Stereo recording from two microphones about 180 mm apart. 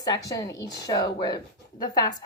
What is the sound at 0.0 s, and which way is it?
Speech, 20° left (ahead or behind).